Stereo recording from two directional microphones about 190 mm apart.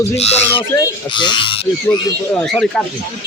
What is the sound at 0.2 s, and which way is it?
Speech, 35° left (ahead or behind).